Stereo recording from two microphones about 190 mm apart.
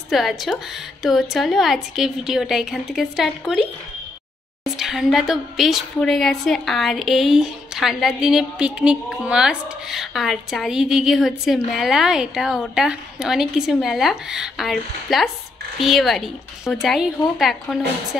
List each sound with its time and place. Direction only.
0.1 s a woman's voice: centre (ahead or behind)
4.7 s a woman's voice: centre (ahead or behind)